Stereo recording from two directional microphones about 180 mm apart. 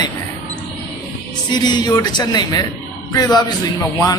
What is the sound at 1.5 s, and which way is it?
A man's voice, 25° left (ahead or behind).